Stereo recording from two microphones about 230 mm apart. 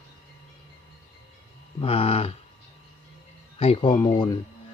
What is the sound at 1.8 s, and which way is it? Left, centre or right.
Speech, left.